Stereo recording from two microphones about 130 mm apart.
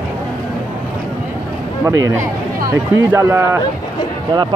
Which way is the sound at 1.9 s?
25° right (ahead or behind).